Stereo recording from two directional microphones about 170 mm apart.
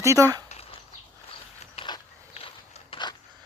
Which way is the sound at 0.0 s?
20° right (ahead or behind).